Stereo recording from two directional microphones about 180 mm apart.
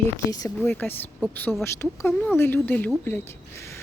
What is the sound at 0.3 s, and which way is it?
Speech, 20° left (ahead or behind).